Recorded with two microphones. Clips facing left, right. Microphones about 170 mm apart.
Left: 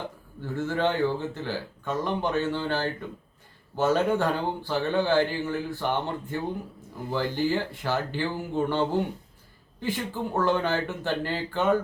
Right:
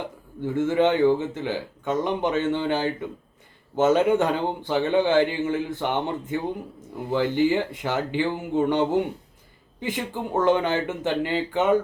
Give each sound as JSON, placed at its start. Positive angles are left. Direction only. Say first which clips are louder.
{"t": 0.4, "sound": "speech", "louder": "right 6 dB", "side_deg": -20}